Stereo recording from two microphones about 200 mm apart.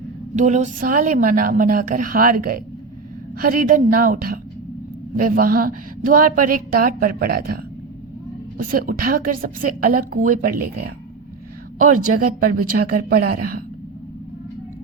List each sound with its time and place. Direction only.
0.3 s a woman's voice: 35° right (ahead or behind)
11.8 s a woman's voice: 40° right (ahead or behind)